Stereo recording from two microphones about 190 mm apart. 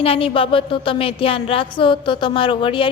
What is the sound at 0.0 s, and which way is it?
A woman's voice, 30° left (ahead or behind).